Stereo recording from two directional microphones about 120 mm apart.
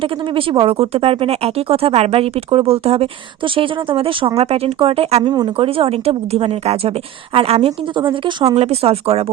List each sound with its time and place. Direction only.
0.0 s speech: 50° right (ahead or behind)
8.5 s speech: 60° right (ahead or behind)